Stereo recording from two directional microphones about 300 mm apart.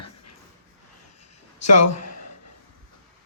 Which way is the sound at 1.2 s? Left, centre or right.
Left.